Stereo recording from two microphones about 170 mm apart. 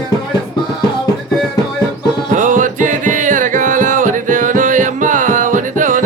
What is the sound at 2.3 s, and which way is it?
Music, 50° right (ahead or behind).